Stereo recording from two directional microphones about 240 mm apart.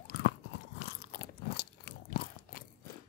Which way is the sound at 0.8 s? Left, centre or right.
Left.